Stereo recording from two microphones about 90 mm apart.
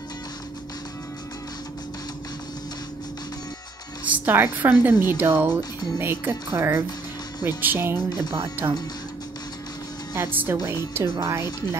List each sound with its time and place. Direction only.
4.1 s a woman's voice: 20° right (ahead or behind)
10.1 s a woman's voice: 25° right (ahead or behind)